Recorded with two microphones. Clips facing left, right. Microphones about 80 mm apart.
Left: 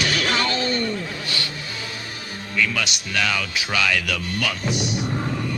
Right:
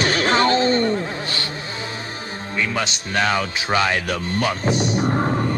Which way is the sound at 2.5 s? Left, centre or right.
Right.